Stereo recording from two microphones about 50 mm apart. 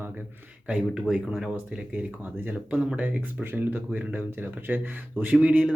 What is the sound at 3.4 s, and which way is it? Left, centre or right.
Speech, right.